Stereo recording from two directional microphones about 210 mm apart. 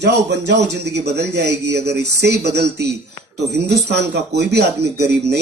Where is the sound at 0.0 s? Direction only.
55° right (ahead or behind).